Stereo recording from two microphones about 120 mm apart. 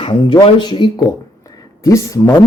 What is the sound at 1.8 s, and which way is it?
Speech, 25° left (ahead or behind).